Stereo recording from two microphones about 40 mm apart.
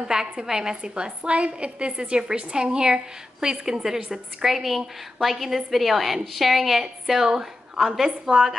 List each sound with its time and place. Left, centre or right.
0.1 s a woman's voice: centre